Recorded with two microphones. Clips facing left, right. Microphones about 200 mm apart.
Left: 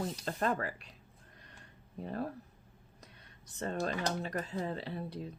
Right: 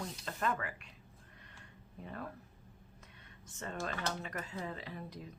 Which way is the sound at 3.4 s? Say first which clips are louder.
Left 6 dB; 35° left (ahead or behind).